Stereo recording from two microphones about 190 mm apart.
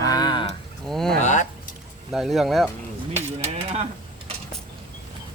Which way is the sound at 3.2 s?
35° right (ahead or behind).